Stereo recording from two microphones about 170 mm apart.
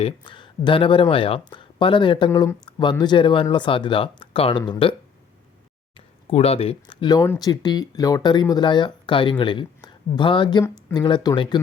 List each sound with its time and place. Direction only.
0.0 s speech: 30° left (ahead or behind)
6.3 s speech: 35° left (ahead or behind)